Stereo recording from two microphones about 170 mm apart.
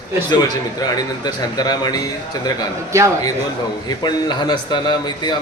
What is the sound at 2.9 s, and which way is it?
Speech, 15° right (ahead or behind).